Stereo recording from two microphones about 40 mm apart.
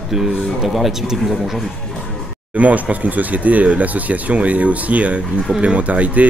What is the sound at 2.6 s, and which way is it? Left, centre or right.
Speech, right.